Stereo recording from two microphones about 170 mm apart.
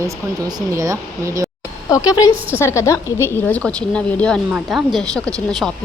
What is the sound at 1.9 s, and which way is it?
A woman's voice, 20° left (ahead or behind).